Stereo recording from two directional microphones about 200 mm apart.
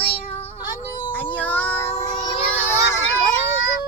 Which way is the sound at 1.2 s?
10° left (ahead or behind).